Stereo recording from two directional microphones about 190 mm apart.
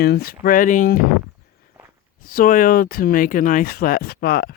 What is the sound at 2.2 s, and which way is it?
Speech, 50° left (ahead or behind).